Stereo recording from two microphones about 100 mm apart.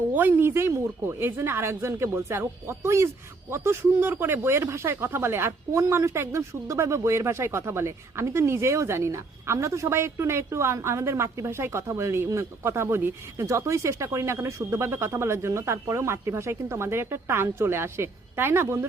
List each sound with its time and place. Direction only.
0.1 s speech: 15° right (ahead or behind)